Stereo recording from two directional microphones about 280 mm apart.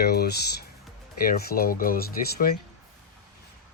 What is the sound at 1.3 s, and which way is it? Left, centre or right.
Speech, left.